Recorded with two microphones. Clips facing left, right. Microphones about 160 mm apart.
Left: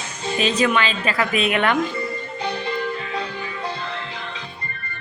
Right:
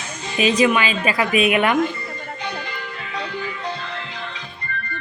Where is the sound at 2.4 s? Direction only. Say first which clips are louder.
Left 7 dB; 30° left (ahead or behind).